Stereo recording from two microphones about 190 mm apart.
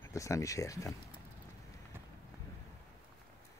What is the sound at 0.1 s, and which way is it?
Speech, 15° left (ahead or behind).